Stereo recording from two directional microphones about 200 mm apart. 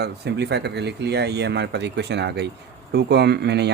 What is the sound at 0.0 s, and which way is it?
Speech, 55° right (ahead or behind).